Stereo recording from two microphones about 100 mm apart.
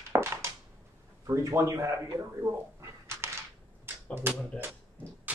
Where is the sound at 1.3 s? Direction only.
30° right (ahead or behind).